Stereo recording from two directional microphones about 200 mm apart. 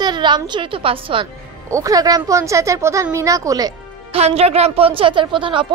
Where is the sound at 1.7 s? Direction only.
15° right (ahead or behind).